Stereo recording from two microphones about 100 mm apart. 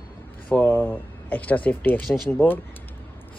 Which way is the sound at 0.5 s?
20° left (ahead or behind).